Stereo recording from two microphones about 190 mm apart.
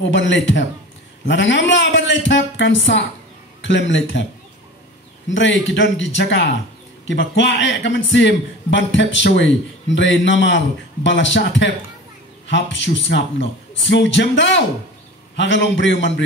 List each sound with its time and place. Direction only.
0.0 s a man's voice: 70° left (ahead or behind)
5.3 s a man's voice: 75° left (ahead or behind)